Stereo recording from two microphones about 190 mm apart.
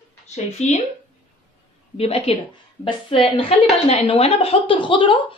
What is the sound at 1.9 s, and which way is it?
A woman's voice, 30° left (ahead or behind).